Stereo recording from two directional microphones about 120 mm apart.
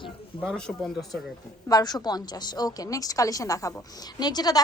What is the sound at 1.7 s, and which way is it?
A woman's voice, 35° left (ahead or behind).